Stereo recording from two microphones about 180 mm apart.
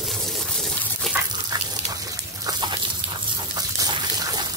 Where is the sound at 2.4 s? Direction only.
25° right (ahead or behind).